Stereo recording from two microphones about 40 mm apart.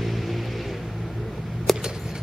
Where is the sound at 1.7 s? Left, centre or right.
Centre.